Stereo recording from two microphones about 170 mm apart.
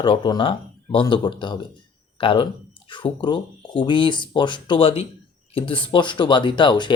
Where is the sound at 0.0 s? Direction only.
30° left (ahead or behind).